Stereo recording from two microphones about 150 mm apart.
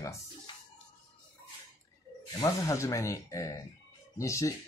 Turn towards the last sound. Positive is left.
turn(degrees=20)  # may be behind; listen again after turning